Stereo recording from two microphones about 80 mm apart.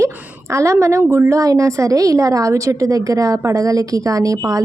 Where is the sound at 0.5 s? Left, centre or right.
Right.